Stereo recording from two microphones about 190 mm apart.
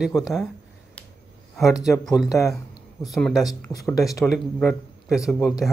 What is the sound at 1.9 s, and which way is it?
Speech, centre (ahead or behind).